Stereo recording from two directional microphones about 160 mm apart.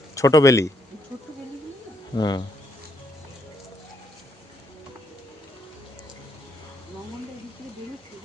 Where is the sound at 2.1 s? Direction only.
25° left (ahead or behind).